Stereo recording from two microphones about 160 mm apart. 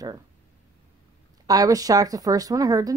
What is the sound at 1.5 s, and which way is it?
Speech, 20° right (ahead or behind).